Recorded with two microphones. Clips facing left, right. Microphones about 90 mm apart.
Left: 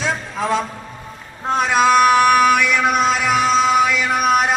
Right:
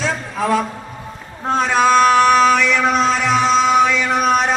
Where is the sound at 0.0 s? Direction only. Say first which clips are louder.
Right 1 dB; 20° left (ahead or behind).